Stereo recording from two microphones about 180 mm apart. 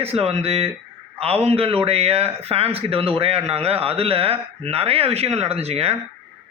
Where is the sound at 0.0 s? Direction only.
35° right (ahead or behind).